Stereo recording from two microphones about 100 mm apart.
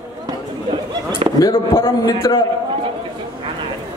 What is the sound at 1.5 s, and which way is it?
Speech, 55° left (ahead or behind).